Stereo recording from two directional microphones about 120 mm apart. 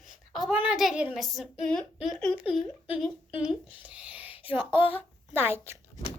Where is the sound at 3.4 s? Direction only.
10° right (ahead or behind).